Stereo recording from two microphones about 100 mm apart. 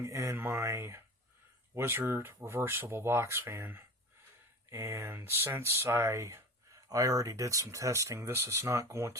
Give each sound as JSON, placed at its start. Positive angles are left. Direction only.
{"t": 0.0, "sound": "speech", "side_deg": -30}